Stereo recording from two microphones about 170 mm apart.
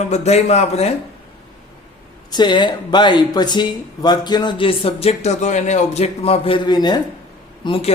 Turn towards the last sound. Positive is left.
turn(degrees=30)  # may be behind; listen again after turning